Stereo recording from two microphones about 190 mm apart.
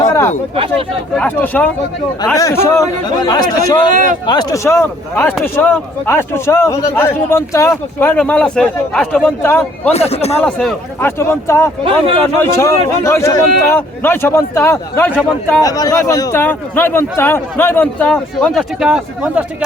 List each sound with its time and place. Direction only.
0.0 s a sound: 15° left (ahead or behind)
0.5 s speech: 30° right (ahead or behind)
1.1 s a man's voice: 5° left (ahead or behind)
3.8 s speech: 45° right (ahead or behind)
4.3 s a man's voice: 20° left (ahead or behind)
9.9 s speech: 35° left (ahead or behind)
10.3 s speech: 5° left (ahead or behind)
11.2 s a man's voice: 15° left (ahead or behind); by 19.6 s 5° right (ahead or behind)